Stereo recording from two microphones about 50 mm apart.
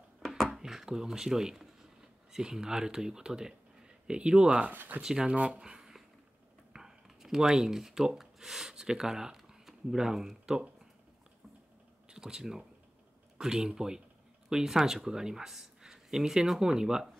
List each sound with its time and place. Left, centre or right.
0.5 s speech: centre; by 4.7 s right
5.0 s speech: centre
5.3 s speech: right
5.6 s a sound: centre
6.7 s speech: centre
12.1 s speech: centre